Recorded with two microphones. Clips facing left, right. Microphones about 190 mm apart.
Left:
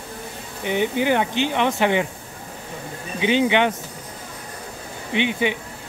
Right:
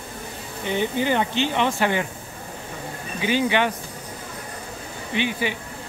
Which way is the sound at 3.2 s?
20° left (ahead or behind).